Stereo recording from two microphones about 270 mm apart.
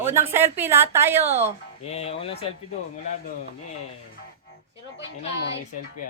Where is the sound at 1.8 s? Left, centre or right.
Left.